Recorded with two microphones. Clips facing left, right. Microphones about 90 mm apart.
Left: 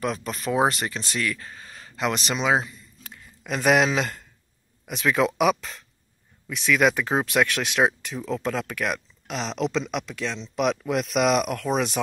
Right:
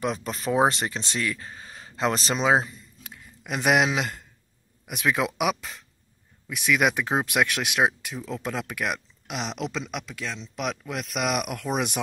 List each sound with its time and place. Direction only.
0.0 s speech: 20° right (ahead or behind)
3.0 s a sound: 10° right (ahead or behind)
4.8 s speech: 10° right (ahead or behind)